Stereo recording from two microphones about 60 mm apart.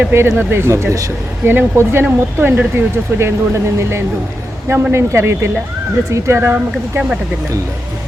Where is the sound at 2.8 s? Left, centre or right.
Right.